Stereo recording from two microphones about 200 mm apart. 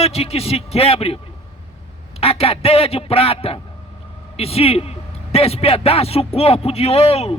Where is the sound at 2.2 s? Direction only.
30° left (ahead or behind).